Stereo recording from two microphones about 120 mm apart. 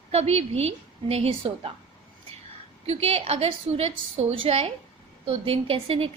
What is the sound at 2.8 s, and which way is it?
A woman's voice, 60° right (ahead or behind).